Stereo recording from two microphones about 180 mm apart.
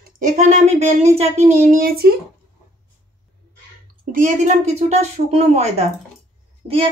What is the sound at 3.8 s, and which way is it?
Speech, 50° right (ahead or behind).